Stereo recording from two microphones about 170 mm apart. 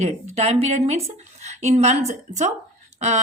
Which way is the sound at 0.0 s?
40° right (ahead or behind).